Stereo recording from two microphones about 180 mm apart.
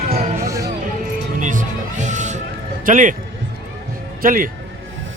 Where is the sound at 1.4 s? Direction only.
45° right (ahead or behind).